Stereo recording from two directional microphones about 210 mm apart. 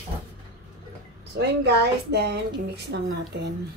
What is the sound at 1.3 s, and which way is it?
A woman's voice, 50° right (ahead or behind).